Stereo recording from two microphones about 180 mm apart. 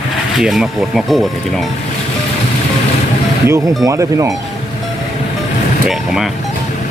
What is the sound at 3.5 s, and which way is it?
Speech, 15° right (ahead or behind).